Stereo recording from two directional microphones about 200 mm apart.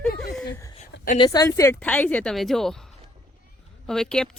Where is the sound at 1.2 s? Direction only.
20° left (ahead or behind); by 2.8 s centre (ahead or behind).